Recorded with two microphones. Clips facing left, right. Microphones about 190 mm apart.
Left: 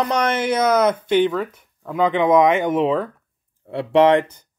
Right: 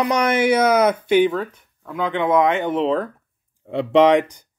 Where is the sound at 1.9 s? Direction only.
15° left (ahead or behind).